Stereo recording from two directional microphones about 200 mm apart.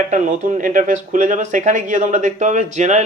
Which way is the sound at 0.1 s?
40° right (ahead or behind).